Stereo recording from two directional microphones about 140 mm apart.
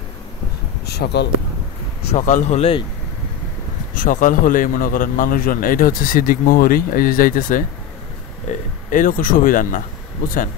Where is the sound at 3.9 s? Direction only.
75° left (ahead or behind).